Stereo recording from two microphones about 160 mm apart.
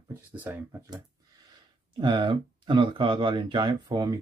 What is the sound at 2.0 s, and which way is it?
Speech, 30° right (ahead or behind).